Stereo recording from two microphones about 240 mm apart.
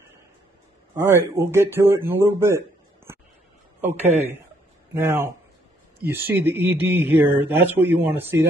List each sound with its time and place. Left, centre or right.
0.9 s speech: centre
4.0 s a man's voice: right
4.9 s speech: centre